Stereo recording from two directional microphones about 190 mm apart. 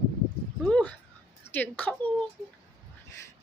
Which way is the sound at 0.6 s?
5° left (ahead or behind).